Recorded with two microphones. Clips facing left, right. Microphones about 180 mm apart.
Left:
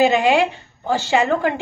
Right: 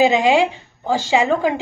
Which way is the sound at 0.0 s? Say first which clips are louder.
Right 1 dB; 10° right (ahead or behind).